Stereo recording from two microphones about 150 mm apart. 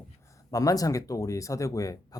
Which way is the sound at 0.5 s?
25° left (ahead or behind).